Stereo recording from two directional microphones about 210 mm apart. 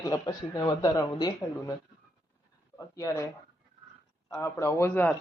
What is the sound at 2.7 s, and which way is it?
Speech, 15° left (ahead or behind).